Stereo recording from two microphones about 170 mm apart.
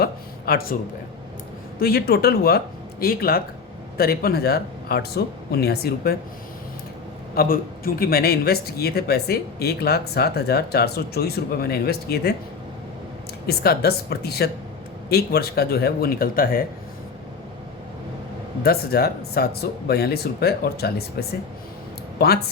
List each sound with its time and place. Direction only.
0.0 s a sound: 65° left (ahead or behind)
1.8 s speech: 65° left (ahead or behind)
7.3 s speech: 60° left (ahead or behind)
13.5 s speech: 65° left (ahead or behind)
18.6 s speech: 65° left (ahead or behind)